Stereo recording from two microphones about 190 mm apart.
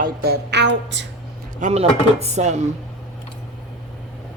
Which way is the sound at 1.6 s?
35° right (ahead or behind).